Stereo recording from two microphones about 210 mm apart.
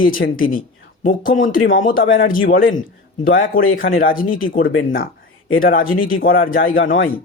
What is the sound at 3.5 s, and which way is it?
Speech, 45° left (ahead or behind).